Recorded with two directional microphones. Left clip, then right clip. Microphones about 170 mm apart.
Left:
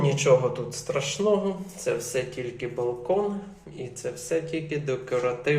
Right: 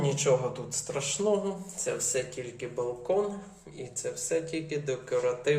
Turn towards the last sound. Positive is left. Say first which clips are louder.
# left 2 dB
turn(degrees=-5)  # may be behind; listen again after turning